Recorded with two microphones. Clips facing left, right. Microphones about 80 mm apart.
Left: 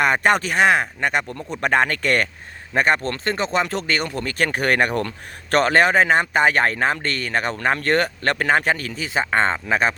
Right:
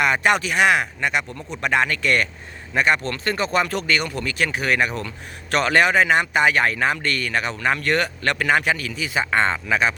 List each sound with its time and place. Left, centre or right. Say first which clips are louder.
0.0 s speech: left 1 dB; left
5.5 s speech: left 2 dB; left